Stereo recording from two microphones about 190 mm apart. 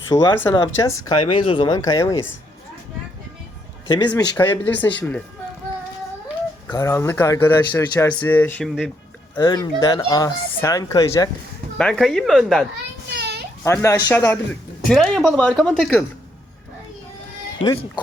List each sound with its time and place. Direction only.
0.1 s speech: 20° left (ahead or behind)
3.8 s speech: 25° left (ahead or behind)
4.1 s a man's voice: 10° left (ahead or behind)
6.7 s a man's voice: 15° left (ahead or behind)
9.3 s speech: 20° left (ahead or behind)
11.8 s speech: 5° left (ahead or behind)
13.1 s a sound: 60° right (ahead or behind)
13.7 s a man's voice: 15° left (ahead or behind)
17.6 s speech: 25° left (ahead or behind)